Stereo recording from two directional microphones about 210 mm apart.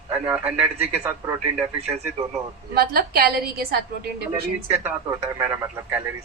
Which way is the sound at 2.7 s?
45° right (ahead or behind).